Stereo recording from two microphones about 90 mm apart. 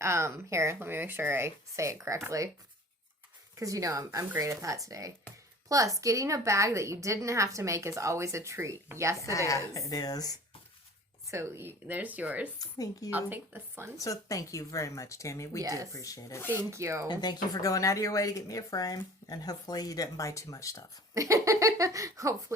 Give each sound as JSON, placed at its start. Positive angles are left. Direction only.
{"t": 0.0, "sound": "a woman's voice", "side_deg": -30}
{"t": 3.6, "sound": "a woman's voice", "side_deg": -40}
{"t": 9.1, "sound": "speech", "side_deg": 35}
{"t": 11.3, "sound": "speech", "side_deg": -30}
{"t": 12.5, "sound": "speech", "side_deg": 40}
{"t": 13.1, "sound": "speech", "side_deg": -20}
{"t": 13.9, "sound": "speech", "side_deg": 40}
{"t": 15.6, "sound": "a woman's voice", "side_deg": -40}
{"t": 15.9, "sound": "speech", "side_deg": 40}
{"t": 16.5, "sound": "a woman's voice", "side_deg": -30}
{"t": 17.1, "sound": "speech", "side_deg": 50}
{"t": 21.2, "sound": "a woman's voice", "side_deg": -35}